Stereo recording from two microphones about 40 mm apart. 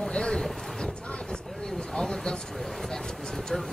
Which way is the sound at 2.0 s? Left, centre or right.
Centre.